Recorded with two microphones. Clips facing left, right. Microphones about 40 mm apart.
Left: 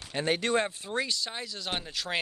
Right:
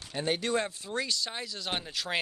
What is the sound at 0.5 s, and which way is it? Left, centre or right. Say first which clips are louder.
Speech: left 2 dB; left.